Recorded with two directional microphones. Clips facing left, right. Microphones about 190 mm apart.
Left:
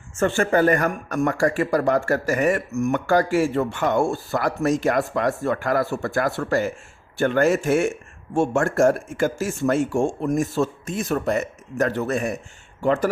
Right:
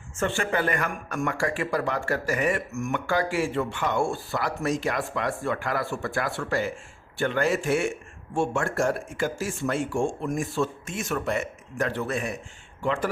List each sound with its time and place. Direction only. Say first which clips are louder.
0.2 s speech: left 7 dB; 45° left (ahead or behind)